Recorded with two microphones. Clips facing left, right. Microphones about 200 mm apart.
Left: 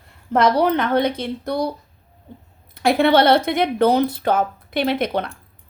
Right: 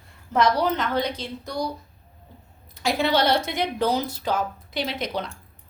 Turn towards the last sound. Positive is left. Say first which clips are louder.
# left 8 dB
turn(degrees=60)  # may be behind; listen again after turning